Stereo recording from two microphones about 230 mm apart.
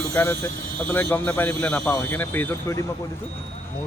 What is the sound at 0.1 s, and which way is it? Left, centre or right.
Speech, centre.